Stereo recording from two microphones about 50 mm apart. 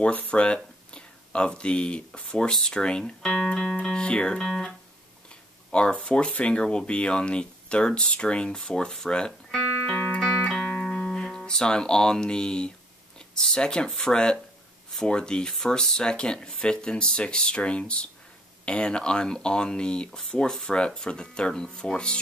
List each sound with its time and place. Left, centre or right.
0.0 s speech: left; by 3.4 s centre
4.0 s speech: left
4.4 s speech: centre
5.7 s speech: left
9.8 s music: left
10.9 s speech: centre